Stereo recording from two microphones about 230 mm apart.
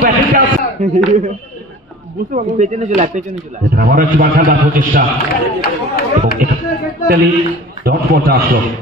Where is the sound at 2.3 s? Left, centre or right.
Right.